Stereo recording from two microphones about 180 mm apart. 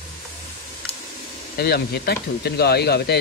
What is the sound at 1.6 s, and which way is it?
Speech, 65° left (ahead or behind).